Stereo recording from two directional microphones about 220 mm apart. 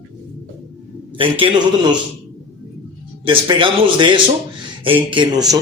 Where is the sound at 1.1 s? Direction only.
25° right (ahead or behind).